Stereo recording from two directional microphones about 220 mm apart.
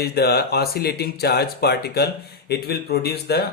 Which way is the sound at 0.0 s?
45° left (ahead or behind).